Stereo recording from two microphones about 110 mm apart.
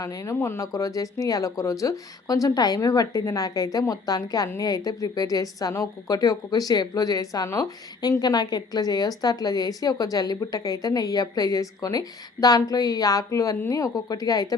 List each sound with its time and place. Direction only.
0.0 s a woman's voice: 30° left (ahead or behind)